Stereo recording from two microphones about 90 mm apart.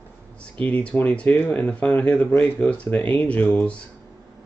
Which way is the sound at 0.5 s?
15° left (ahead or behind).